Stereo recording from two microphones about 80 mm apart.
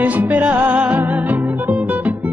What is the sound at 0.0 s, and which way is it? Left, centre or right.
Music, centre.